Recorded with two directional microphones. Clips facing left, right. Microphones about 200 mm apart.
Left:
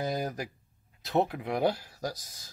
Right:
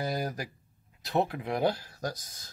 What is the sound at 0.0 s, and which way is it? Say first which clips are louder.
Speech: left 1 dB; 20° left (ahead or behind).